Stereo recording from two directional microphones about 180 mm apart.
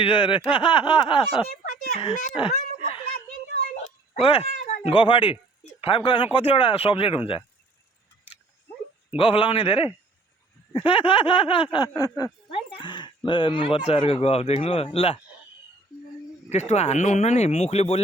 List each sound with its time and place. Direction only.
0.0 s speech: 30° left (ahead or behind)
1.4 s speech: 40° left (ahead or behind)
2.3 s a sound: 30° left (ahead or behind)
4.2 s speech: 30° left (ahead or behind)
9.1 s speech: 30° left (ahead or behind)
16.5 s speech: 40° left (ahead or behind)